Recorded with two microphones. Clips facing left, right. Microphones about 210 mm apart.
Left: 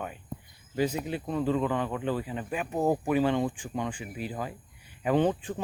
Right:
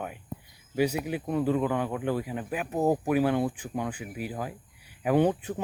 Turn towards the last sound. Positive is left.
turn(degrees=-10)  # may be behind; listen again after turning